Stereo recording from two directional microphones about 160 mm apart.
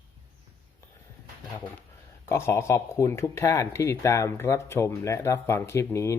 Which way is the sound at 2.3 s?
15° left (ahead or behind).